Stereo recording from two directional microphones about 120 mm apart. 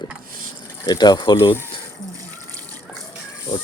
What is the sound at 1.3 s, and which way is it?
Speech, 20° left (ahead or behind).